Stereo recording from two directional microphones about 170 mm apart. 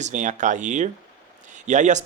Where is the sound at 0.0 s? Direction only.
45° right (ahead or behind).